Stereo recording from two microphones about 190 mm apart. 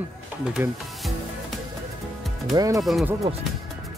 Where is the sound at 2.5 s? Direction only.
15° right (ahead or behind).